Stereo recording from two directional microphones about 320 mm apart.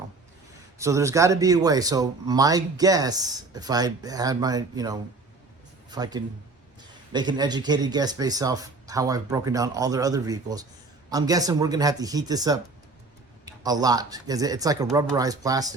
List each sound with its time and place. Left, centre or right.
0.8 s speech: centre